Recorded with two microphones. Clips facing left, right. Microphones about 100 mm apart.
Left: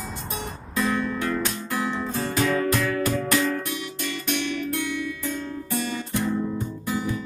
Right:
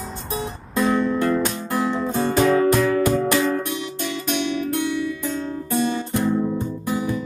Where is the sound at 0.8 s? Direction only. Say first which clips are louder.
Right 5 dB; 20° right (ahead or behind).